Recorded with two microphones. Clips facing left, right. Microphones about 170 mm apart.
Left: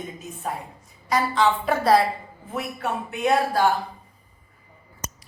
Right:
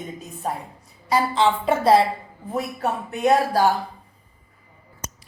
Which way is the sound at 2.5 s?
40° right (ahead or behind).